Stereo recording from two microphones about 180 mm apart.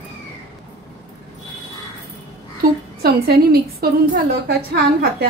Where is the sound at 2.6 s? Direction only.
55° right (ahead or behind).